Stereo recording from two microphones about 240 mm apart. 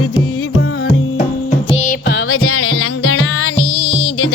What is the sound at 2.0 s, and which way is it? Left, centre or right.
Music, left.